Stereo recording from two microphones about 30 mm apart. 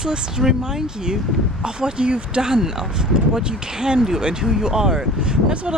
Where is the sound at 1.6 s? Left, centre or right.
Right.